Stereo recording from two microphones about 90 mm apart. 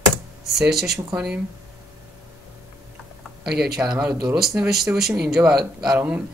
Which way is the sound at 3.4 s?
5° right (ahead or behind).